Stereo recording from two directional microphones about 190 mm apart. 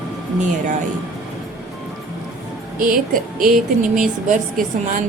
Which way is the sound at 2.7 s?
45° right (ahead or behind).